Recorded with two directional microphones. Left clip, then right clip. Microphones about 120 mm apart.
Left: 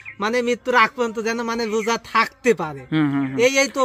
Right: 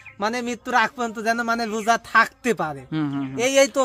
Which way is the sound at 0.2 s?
40° right (ahead or behind).